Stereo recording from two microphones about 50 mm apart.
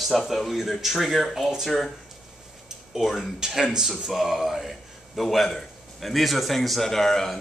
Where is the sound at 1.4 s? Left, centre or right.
Centre.